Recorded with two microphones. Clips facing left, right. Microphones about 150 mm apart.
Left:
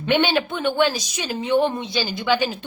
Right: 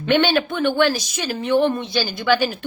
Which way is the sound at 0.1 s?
15° left (ahead or behind).